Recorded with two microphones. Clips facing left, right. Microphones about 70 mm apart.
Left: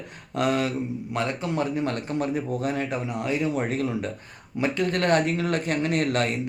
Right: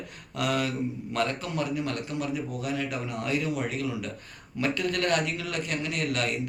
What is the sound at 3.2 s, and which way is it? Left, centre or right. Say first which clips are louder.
Speech: left 3 dB; left.